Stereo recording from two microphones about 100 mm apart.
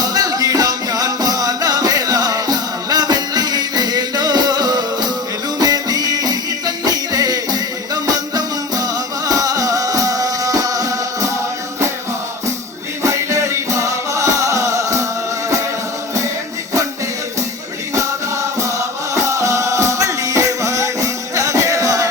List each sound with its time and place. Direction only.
0.0 s music: 40° right (ahead or behind)
13.0 s music: 30° right (ahead or behind)
17.9 s music: 30° right (ahead or behind)